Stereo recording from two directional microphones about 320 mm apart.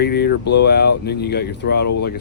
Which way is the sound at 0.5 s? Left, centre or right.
Left.